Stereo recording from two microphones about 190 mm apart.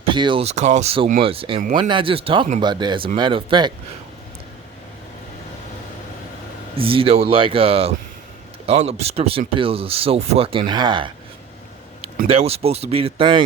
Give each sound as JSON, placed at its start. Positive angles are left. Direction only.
{"t": 0.0, "sound": "speech", "side_deg": -25}
{"t": 6.7, "sound": "speech", "side_deg": -30}
{"t": 12.3, "sound": "speech", "side_deg": -30}